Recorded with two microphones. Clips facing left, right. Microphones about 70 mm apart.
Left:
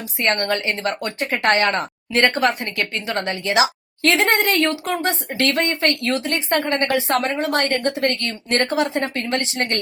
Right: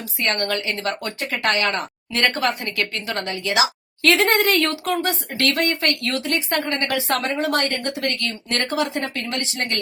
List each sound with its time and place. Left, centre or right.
0.2 s a woman's voice: left